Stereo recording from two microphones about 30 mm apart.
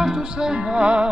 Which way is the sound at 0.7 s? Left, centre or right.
Right.